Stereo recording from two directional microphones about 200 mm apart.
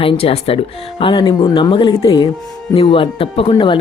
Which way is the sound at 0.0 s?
30° left (ahead or behind).